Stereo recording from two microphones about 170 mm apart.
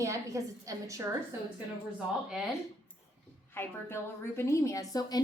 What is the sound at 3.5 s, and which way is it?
A woman's voice, 15° left (ahead or behind).